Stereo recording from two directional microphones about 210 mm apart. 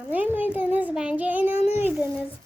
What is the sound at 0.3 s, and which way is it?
A child's voice, 10° right (ahead or behind).